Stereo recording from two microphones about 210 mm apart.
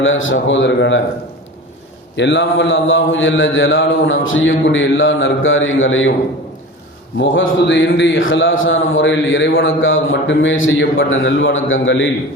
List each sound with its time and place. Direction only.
0.0 s a man's voice: 65° left (ahead or behind)
2.1 s speech: 55° left (ahead or behind)
7.2 s speech: 60° left (ahead or behind)